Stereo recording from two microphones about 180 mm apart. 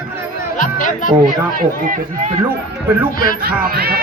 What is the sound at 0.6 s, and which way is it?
Music, 45° left (ahead or behind).